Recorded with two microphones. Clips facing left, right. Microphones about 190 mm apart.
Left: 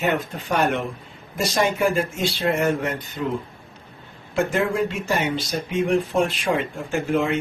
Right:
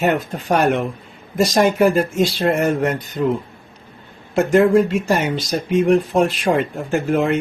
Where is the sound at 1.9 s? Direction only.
40° right (ahead or behind).